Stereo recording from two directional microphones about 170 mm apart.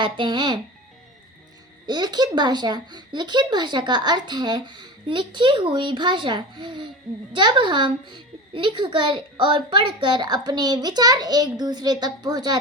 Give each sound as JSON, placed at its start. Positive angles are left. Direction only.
{"t": 0.0, "sound": "a child's voice", "side_deg": -25}
{"t": 1.9, "sound": "a child's voice", "side_deg": -25}